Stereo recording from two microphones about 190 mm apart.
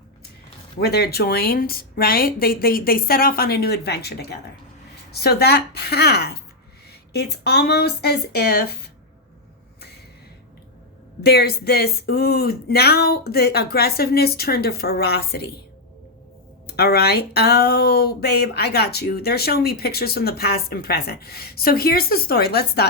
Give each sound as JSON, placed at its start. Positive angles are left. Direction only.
{"t": 0.8, "sound": "speech", "side_deg": 55}
{"t": 11.2, "sound": "speech", "side_deg": 55}
{"t": 16.6, "sound": "speech", "side_deg": 55}